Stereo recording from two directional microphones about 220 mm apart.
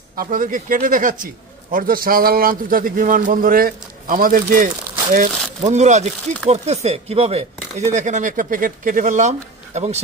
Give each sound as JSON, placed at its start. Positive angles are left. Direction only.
{"t": 0.2, "sound": "speech", "side_deg": -40}